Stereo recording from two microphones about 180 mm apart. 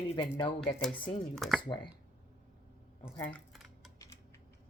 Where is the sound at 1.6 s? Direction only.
25° left (ahead or behind).